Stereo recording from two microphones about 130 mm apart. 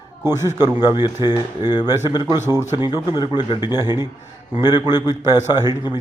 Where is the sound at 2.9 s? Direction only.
35° left (ahead or behind).